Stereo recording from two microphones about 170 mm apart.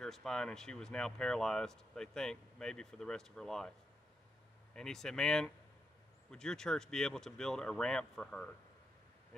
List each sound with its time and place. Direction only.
0.0 s speech: 5° left (ahead or behind)
4.7 s speech: 5° left (ahead or behind)